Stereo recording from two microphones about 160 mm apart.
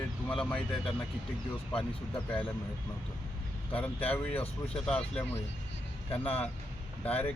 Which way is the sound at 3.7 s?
10° left (ahead or behind).